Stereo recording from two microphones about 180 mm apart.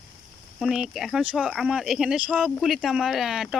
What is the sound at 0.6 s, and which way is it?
Speech, centre (ahead or behind).